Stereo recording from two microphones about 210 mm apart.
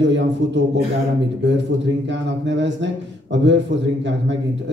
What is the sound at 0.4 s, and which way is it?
Speech, 60° right (ahead or behind).